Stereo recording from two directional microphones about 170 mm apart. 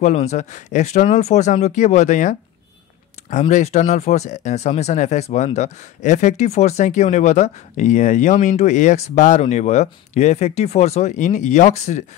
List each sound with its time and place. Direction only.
0.0 s speech: 40° left (ahead or behind)